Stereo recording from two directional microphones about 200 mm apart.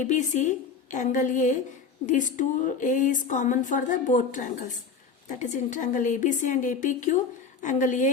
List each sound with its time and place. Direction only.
0.0 s speech: 40° left (ahead or behind)